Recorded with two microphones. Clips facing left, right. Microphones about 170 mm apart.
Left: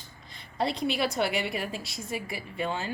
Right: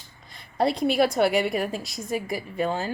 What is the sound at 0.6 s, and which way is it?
A woman's voice, 50° right (ahead or behind).